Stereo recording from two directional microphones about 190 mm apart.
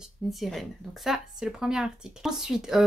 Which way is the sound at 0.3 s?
Centre (ahead or behind).